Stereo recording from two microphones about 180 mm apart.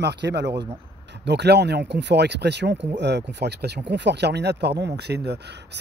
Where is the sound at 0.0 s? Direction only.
70° right (ahead or behind).